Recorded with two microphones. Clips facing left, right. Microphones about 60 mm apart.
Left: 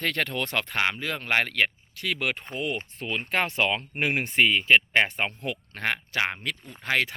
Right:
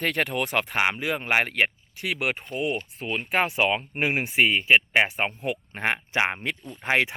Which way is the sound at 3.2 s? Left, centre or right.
Centre.